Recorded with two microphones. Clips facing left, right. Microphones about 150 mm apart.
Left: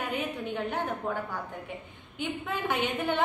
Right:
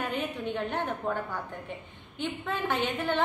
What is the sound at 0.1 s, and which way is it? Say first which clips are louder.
A woman's voice: even; centre (ahead or behind).